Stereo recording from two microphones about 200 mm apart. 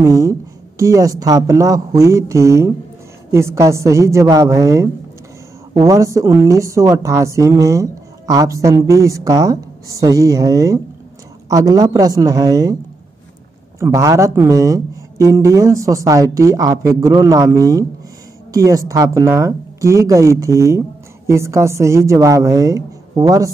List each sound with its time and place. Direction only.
0.0 s a woman's voice: 15° right (ahead or behind)
13.7 s a woman's voice: 15° right (ahead or behind)